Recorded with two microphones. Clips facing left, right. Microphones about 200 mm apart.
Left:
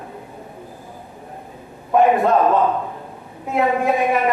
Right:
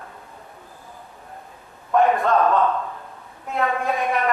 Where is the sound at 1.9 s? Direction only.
15° left (ahead or behind).